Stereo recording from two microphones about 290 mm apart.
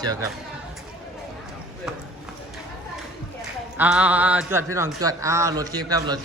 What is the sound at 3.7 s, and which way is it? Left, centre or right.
A man's voice, centre.